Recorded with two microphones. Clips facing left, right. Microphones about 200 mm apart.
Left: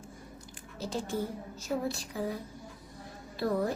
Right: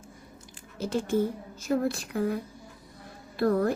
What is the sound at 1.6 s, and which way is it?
A woman's voice, 60° right (ahead or behind).